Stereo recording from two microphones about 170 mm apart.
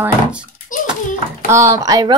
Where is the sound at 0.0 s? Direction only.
5° right (ahead or behind).